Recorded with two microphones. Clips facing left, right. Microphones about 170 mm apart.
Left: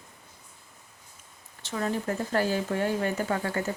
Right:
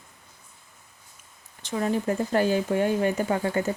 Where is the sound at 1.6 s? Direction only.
20° right (ahead or behind).